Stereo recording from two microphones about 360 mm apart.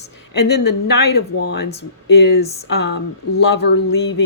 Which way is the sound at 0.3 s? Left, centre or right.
Left.